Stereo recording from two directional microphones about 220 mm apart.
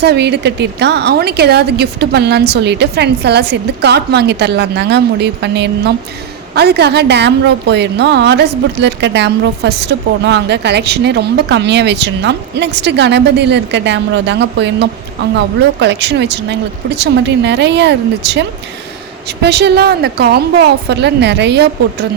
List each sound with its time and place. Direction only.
0.0 s a woman's voice: 50° right (ahead or behind)